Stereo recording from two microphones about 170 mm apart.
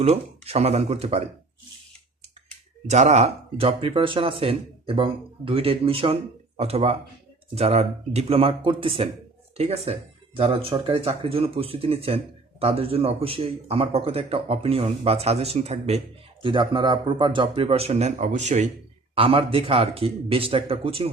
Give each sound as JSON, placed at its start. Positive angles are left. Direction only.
{"t": 0.0, "sound": "speech", "side_deg": -40}
{"t": 2.9, "sound": "speech", "side_deg": -40}
{"t": 16.4, "sound": "speech", "side_deg": -30}
{"t": 19.1, "sound": "speech", "side_deg": -35}